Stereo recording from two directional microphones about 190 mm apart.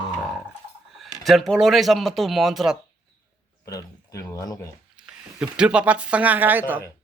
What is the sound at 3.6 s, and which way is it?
Speech, 15° left (ahead or behind).